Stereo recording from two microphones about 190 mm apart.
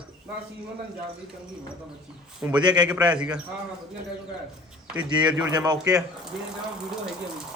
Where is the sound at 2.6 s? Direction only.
25° right (ahead or behind).